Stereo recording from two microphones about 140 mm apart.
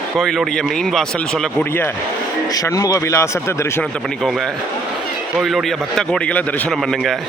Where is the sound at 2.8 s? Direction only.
20° left (ahead or behind).